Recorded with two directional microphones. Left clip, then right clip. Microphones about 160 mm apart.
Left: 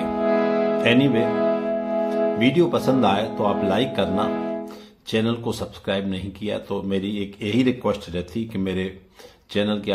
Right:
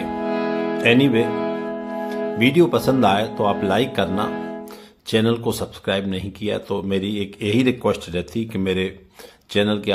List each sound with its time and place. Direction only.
0.1 s music: 25° left (ahead or behind)
0.8 s speech: 35° right (ahead or behind)
1.2 s music: 20° left (ahead or behind)
2.3 s speech: 35° right (ahead or behind)